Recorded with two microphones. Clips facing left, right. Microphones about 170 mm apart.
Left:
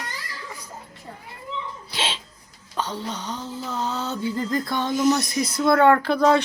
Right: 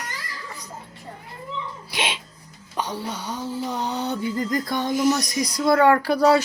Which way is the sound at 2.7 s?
10° right (ahead or behind).